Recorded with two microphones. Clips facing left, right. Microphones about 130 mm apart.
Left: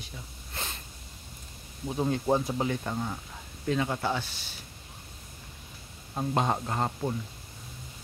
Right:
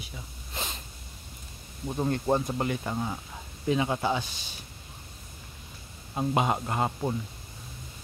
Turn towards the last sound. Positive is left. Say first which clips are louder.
# right 1 dB
turn(degrees=-5)  # may be behind; listen again after turning